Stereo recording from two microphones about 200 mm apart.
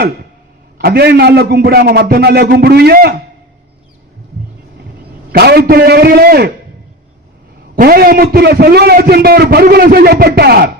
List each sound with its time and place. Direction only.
0.8 s a man's voice: 50° right (ahead or behind)
5.3 s a man's voice: 50° right (ahead or behind)
7.8 s a man's voice: 50° right (ahead or behind)